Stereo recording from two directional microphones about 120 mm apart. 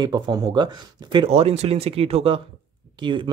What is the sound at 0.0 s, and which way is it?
Speech, 35° right (ahead or behind).